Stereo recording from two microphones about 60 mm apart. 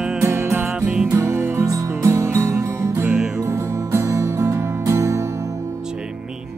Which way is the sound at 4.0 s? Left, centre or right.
Right.